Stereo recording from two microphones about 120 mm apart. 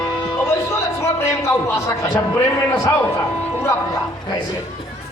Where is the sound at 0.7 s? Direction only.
25° left (ahead or behind).